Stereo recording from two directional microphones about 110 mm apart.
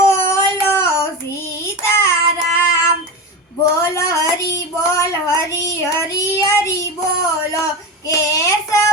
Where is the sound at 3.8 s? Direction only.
30° left (ahead or behind).